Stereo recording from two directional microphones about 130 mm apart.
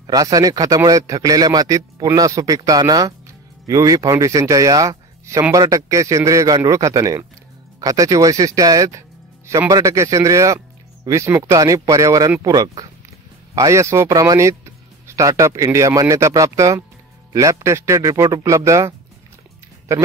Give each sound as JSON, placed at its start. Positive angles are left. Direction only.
{"t": 0.0, "sound": "a man's voice", "side_deg": -30}